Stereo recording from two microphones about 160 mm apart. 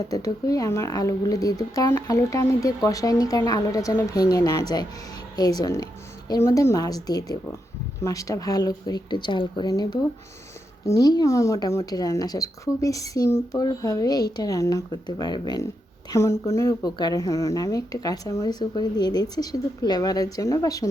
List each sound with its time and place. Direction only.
0.1 s speech: 20° left (ahead or behind)